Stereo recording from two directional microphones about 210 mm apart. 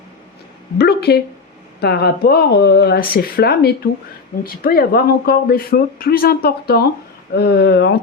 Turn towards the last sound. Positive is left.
turn(degrees=50)  # may be behind; listen again after turning